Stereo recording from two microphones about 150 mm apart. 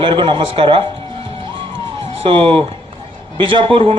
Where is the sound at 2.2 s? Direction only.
35° right (ahead or behind).